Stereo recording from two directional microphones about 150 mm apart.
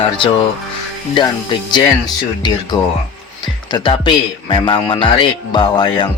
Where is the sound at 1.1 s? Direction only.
30° left (ahead or behind).